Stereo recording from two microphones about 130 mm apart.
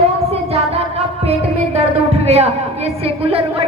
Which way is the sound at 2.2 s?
55° right (ahead or behind).